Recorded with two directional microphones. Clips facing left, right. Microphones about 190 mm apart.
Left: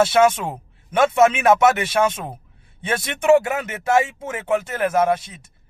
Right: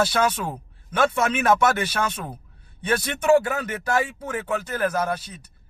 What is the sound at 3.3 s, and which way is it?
Speech, 20° left (ahead or behind).